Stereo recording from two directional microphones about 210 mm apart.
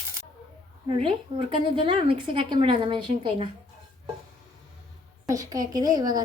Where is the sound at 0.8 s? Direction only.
25° right (ahead or behind).